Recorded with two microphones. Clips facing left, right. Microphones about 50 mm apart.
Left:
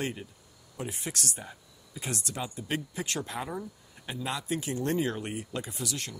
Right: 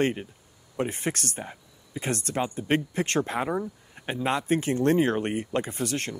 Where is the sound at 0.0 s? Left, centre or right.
Right.